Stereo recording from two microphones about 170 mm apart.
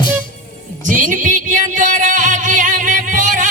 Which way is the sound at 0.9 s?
50° right (ahead or behind).